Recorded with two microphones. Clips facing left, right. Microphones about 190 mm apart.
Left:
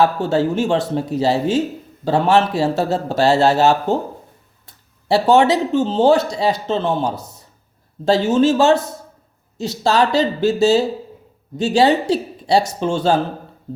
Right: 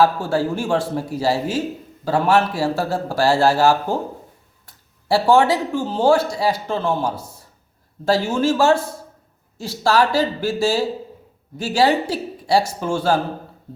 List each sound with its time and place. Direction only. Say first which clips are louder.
0.0 s speech: left 2 dB; 20° left (ahead or behind)